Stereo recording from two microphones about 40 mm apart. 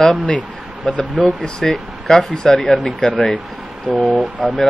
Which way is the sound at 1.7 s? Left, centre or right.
Centre.